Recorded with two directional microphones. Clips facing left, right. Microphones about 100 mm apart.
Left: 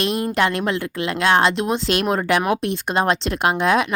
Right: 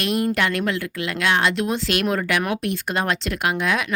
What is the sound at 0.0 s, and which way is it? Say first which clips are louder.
Speech: left 2 dB; 25° left (ahead or behind).